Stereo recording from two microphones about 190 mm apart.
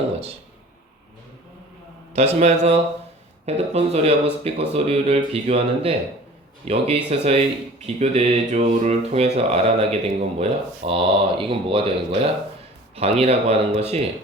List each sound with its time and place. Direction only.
2.1 s speech: 35° right (ahead or behind)